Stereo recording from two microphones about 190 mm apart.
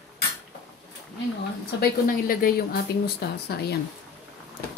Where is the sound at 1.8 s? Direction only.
50° left (ahead or behind).